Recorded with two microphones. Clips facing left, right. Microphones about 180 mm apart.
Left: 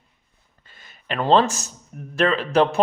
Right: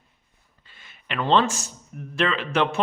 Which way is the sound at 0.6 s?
40° left (ahead or behind).